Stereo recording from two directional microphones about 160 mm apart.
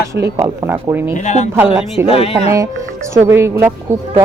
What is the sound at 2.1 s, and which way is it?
Speech, 35° left (ahead or behind).